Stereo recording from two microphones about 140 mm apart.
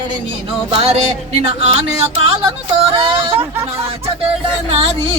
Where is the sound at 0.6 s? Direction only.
40° right (ahead or behind).